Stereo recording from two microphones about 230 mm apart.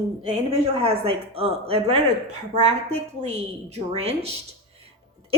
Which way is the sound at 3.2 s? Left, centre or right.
Right.